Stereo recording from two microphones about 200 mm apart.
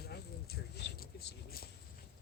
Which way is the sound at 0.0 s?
50° left (ahead or behind).